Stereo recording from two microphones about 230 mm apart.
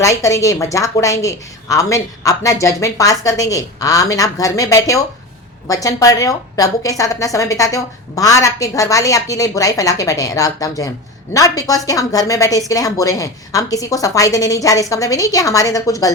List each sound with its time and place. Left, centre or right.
0.0 s a woman's voice: centre